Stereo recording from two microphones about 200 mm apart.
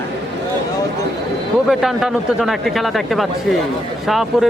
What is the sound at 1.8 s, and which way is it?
Speech, centre (ahead or behind).